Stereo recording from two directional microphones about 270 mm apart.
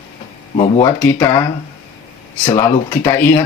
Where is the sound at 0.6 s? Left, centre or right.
Centre.